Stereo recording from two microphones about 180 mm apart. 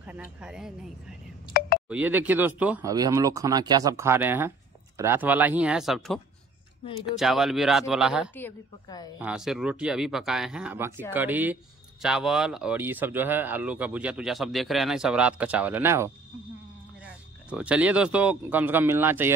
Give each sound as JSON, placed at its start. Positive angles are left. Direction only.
{"t": 0.0, "sound": "speech", "side_deg": -10}
{"t": 2.9, "sound": "speech", "side_deg": -20}
{"t": 8.8, "sound": "a woman's voice", "side_deg": 20}
{"t": 9.2, "sound": "speech", "side_deg": -5}